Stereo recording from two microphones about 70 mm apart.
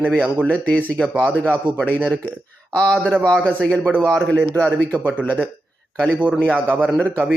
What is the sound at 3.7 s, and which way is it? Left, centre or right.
Speech, right.